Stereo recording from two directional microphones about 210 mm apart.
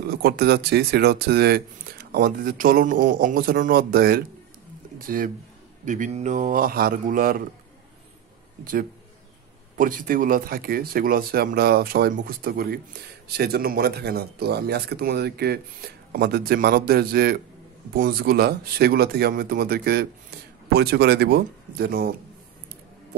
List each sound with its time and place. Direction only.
0.1 s a man's voice: 50° right (ahead or behind)
9.8 s speech: 40° right (ahead or behind)